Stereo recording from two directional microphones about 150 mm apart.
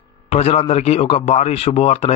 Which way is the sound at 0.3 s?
45° left (ahead or behind).